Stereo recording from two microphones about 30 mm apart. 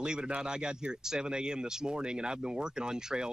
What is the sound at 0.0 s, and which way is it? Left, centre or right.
Speech, right.